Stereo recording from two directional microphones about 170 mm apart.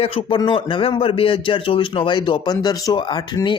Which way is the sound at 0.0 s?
35° left (ahead or behind).